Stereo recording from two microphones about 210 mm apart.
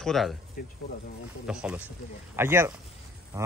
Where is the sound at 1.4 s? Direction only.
5° right (ahead or behind).